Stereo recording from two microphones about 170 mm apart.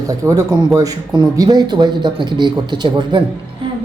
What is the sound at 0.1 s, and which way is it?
Speech, 20° right (ahead or behind).